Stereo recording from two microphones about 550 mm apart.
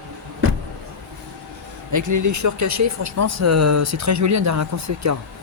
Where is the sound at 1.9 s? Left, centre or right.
Right.